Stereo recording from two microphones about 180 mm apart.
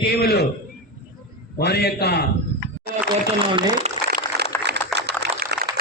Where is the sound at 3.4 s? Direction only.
25° right (ahead or behind).